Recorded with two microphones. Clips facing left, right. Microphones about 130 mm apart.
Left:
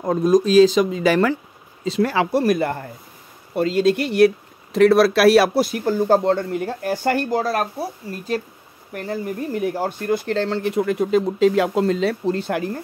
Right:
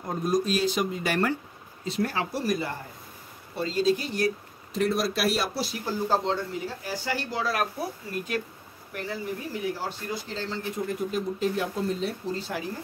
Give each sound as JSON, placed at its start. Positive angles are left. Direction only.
{"t": 0.0, "sound": "speech", "side_deg": 90}
{"t": 5.5, "sound": "speech", "side_deg": 55}
{"t": 8.9, "sound": "speech", "side_deg": 45}